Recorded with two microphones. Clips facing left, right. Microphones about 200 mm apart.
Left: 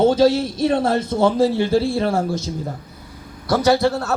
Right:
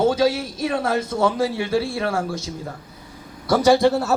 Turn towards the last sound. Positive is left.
turn(degrees=-5)  # may be behind; listen again after turning